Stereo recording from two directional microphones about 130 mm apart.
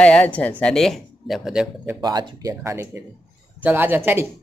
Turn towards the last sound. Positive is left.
turn(degrees=-15)  # may be behind; listen again after turning